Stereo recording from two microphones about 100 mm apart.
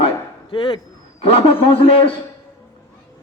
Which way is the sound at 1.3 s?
65° left (ahead or behind).